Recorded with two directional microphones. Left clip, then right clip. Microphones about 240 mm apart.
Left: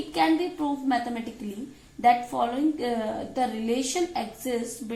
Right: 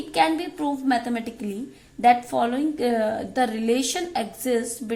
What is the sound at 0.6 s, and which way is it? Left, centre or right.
A woman's voice, right.